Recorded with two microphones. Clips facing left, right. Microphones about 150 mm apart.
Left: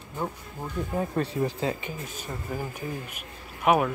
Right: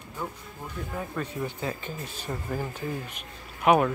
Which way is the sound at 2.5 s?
10° left (ahead or behind).